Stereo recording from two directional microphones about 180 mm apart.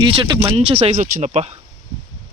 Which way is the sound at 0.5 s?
35° right (ahead or behind).